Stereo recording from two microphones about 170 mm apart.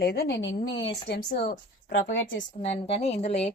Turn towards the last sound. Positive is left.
turn(degrees=40)  # may be behind; listen again after turning